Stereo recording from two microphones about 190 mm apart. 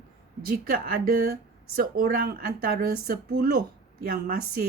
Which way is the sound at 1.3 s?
50° right (ahead or behind).